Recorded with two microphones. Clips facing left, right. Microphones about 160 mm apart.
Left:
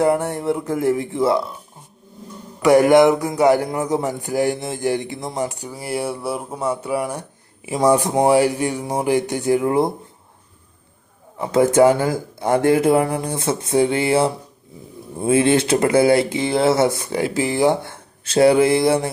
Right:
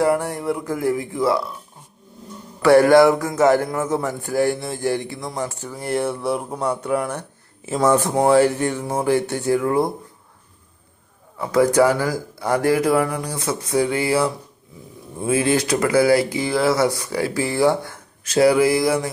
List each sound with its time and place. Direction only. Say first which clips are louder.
0.0 s speech: left 1 dB; 25° left (ahead or behind)
2.6 s speech: even; 20° left (ahead or behind)
11.3 s speech: left 2 dB; 25° left (ahead or behind)